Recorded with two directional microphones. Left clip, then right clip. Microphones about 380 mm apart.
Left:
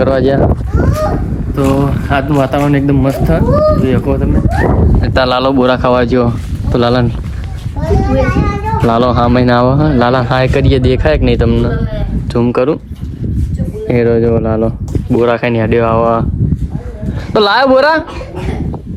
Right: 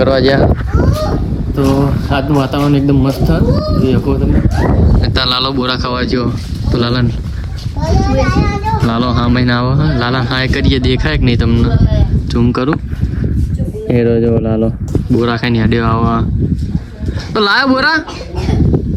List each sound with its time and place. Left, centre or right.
0.0 s speech: centre
7.8 s a child's voice: right
8.9 s speech: centre
13.8 s speech: centre
17.3 s speech: centre